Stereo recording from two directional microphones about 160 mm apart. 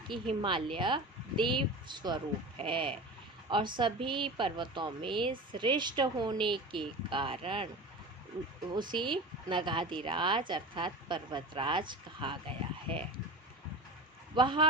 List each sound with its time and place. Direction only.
0.1 s speech: 30° right (ahead or behind)
8.7 s speech: 30° right (ahead or behind)
14.3 s speech: 30° right (ahead or behind)